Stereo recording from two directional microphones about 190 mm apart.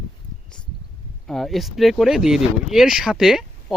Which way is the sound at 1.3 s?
Centre (ahead or behind).